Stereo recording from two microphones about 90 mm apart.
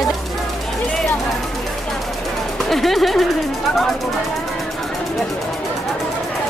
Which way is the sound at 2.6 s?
Centre (ahead or behind).